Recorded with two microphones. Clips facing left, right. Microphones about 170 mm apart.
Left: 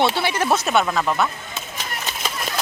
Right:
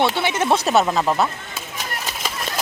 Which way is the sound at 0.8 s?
20° right (ahead or behind).